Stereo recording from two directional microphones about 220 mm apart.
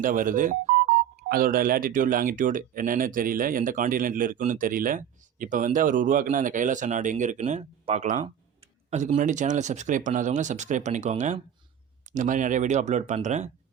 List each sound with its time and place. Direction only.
0.0 s speech: 40° right (ahead or behind)